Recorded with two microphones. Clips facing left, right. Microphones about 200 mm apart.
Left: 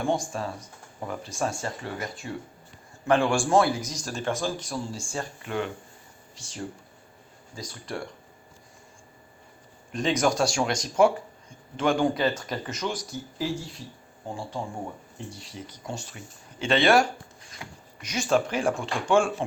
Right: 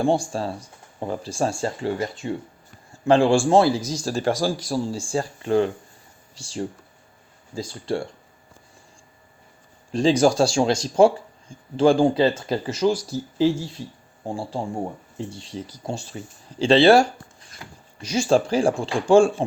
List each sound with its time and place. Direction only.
0.0 s speech: 30° right (ahead or behind)
9.9 s speech: 30° right (ahead or behind)